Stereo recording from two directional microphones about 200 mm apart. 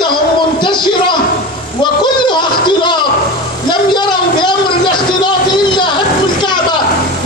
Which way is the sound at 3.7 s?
20° left (ahead or behind).